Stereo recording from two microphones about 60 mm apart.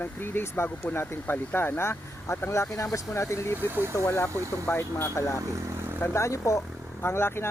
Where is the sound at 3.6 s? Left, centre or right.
Right.